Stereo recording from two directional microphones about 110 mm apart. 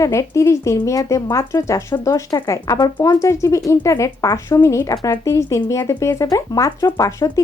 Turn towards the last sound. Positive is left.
turn(degrees=35)  # may be behind; listen again after turning